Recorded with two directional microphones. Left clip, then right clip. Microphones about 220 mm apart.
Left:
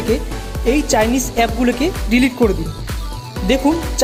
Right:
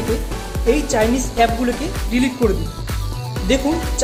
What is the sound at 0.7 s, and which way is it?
Speech, 45° left (ahead or behind).